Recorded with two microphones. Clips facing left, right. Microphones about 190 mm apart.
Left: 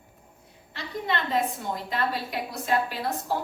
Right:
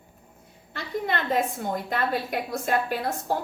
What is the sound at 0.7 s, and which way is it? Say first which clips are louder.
A woman's voice: right 2 dB; 50° right (ahead or behind).